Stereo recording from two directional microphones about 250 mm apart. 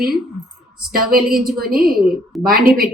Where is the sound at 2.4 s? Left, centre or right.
Right.